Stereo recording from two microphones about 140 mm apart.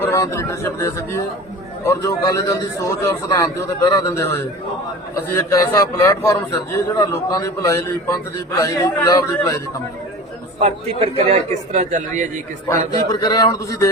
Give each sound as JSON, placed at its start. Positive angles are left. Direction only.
{"t": 0.0, "sound": "a man's voice", "side_deg": 20}
{"t": 10.6, "sound": "a man's voice", "side_deg": -45}
{"t": 12.6, "sound": "a man's voice", "side_deg": 30}